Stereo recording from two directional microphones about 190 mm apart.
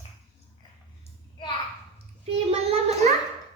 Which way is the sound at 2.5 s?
35° right (ahead or behind).